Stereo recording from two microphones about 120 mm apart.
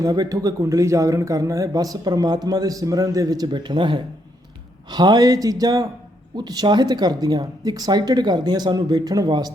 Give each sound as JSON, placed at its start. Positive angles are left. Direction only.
{"t": 0.0, "sound": "speech", "side_deg": -30}